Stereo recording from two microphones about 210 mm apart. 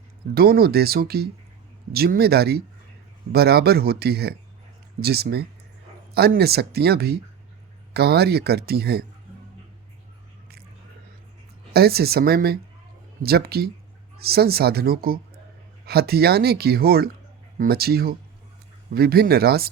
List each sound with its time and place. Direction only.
0.3 s speech: 45° right (ahead or behind)
11.7 s speech: 50° right (ahead or behind)